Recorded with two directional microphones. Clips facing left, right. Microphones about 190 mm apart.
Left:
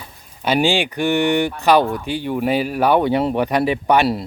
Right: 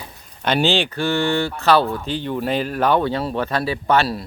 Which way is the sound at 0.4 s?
10° left (ahead or behind).